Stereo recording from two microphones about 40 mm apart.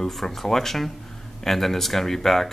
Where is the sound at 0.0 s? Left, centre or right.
Centre.